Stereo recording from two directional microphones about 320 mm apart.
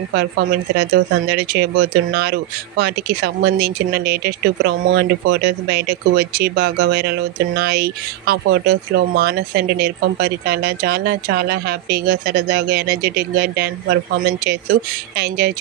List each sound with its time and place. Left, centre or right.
0.2 s speech: right